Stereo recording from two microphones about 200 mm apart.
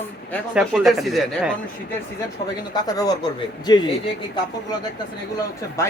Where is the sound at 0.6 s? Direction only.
Centre (ahead or behind).